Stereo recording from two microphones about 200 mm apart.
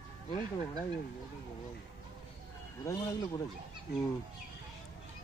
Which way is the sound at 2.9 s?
15° left (ahead or behind).